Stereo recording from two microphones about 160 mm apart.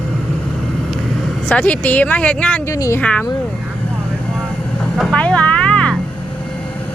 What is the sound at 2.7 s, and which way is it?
Speech, 20° left (ahead or behind).